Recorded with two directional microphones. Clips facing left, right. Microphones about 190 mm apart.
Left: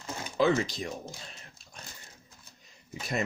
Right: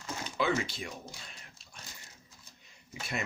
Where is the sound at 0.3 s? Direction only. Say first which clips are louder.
Left 6 dB; 40° left (ahead or behind).